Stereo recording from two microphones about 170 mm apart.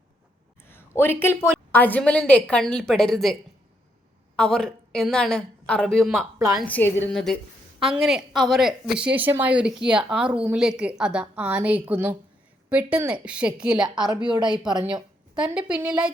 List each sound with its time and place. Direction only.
0.7 s a sound: 15° left (ahead or behind)
1.2 s a woman's voice: 15° left (ahead or behind)
4.4 s a woman's voice: 5° left (ahead or behind)
14.7 s speech: 25° right (ahead or behind)
15.4 s a woman's voice: 5° right (ahead or behind)